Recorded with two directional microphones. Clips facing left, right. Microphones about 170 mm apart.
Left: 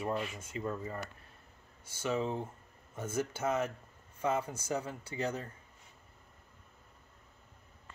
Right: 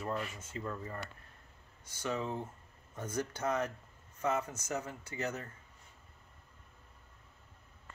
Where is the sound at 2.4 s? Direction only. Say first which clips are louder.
Left 2 dB; 10° left (ahead or behind).